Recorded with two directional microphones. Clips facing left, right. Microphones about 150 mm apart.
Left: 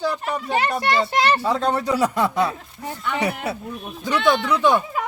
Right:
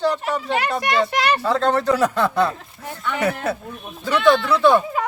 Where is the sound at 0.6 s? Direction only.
30° left (ahead or behind).